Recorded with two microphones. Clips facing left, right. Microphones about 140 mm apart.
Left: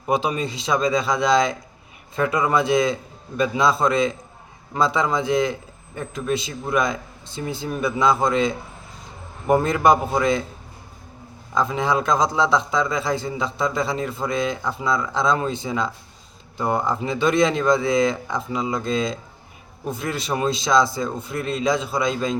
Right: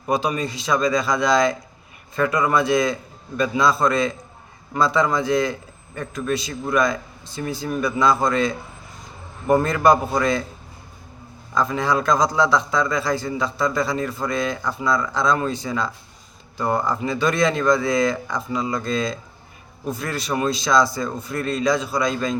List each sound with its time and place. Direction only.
0.0 s a man's voice: 25° left (ahead or behind)
11.5 s a man's voice: 20° left (ahead or behind)